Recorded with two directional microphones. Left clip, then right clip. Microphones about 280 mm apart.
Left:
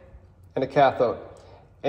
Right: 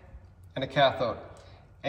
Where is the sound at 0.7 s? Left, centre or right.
Left.